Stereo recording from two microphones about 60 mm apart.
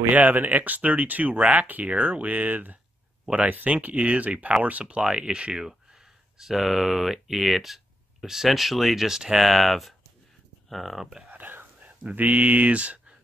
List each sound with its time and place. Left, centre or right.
0.1 s speech: right; by 11.1 s centre
11.3 s whispering: right
12.0 s speech: right